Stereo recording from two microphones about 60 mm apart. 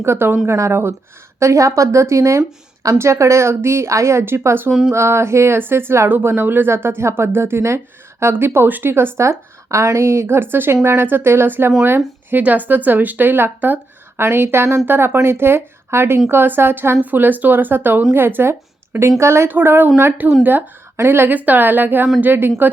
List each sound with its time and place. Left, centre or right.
0.0 s a woman's voice: right
1.4 s a woman's voice: right
17.0 s speech: right
19.2 s a woman's voice: right
19.5 s speech: right
20.9 s speech: right
21.3 s speech: right